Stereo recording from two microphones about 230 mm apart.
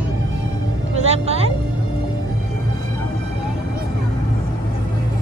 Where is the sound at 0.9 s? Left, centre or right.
Right.